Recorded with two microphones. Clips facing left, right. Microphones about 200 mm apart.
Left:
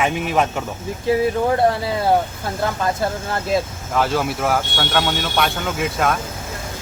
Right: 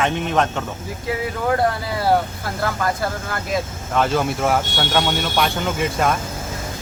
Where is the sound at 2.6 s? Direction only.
25° left (ahead or behind).